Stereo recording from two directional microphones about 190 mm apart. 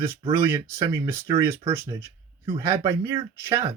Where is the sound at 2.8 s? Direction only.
15° right (ahead or behind).